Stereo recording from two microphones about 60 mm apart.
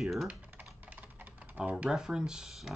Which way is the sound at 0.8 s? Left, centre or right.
Right.